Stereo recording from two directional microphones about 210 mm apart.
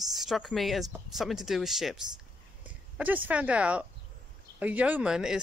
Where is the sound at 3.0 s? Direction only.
10° right (ahead or behind).